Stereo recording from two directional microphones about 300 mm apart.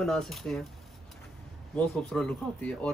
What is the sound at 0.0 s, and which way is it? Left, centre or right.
Speech, centre.